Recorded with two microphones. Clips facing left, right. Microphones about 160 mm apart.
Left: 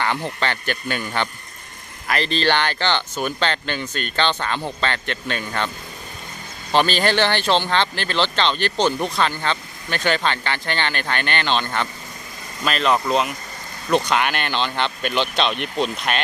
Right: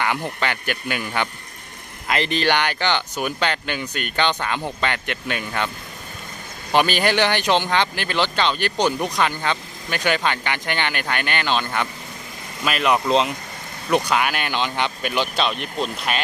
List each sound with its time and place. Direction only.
0.0 s speech: 10° right (ahead or behind)
13.1 s speech: 25° right (ahead or behind)
13.9 s speech: 10° right (ahead or behind)